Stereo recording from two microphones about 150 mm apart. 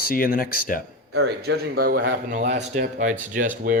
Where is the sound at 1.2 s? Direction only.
90° right.